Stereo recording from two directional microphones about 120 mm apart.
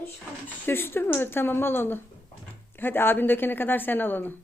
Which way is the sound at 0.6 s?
20° left (ahead or behind).